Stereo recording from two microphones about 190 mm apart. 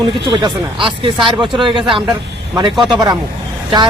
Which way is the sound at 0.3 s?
25° right (ahead or behind).